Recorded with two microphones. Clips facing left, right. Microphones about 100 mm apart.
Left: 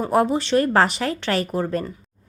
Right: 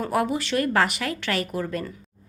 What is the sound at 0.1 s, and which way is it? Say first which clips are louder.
A woman's voice: left 7 dB; 30° left (ahead or behind).